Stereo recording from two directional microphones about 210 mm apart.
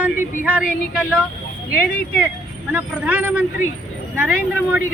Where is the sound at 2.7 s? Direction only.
5° right (ahead or behind).